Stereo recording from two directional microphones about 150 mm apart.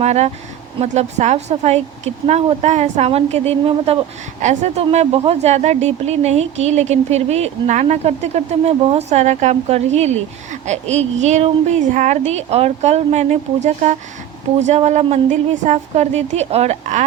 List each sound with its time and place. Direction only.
0.0 s a woman's voice: 45° right (ahead or behind)